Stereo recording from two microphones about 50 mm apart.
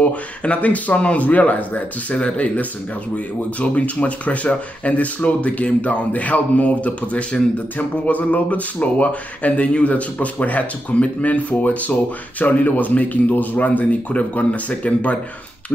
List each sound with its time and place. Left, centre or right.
0.0 s speech: left
3.7 s speech: left